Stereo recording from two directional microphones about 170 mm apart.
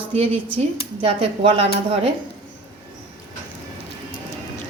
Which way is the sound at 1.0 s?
35° right (ahead or behind).